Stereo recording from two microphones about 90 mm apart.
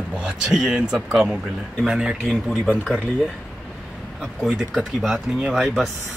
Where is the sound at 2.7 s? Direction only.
5° left (ahead or behind).